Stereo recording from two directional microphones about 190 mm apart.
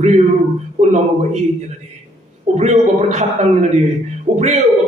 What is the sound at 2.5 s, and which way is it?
A man's voice, 35° right (ahead or behind).